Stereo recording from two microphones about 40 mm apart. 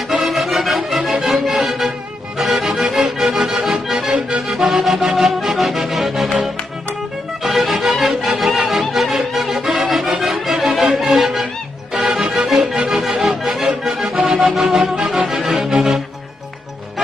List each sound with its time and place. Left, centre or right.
0.1 s music: centre
2.3 s accordion: centre
4.1 s music: centre
4.5 s music: centre
7.4 s music: centre